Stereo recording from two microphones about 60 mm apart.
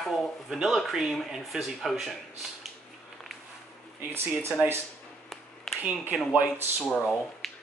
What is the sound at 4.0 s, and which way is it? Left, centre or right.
Speech, right.